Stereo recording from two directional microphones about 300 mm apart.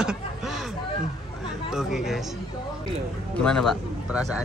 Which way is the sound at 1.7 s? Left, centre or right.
Centre.